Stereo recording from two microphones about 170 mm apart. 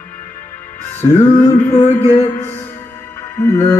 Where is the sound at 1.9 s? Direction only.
15° left (ahead or behind).